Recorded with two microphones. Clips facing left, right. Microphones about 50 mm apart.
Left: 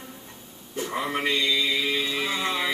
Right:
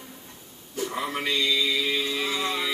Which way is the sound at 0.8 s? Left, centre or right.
Centre.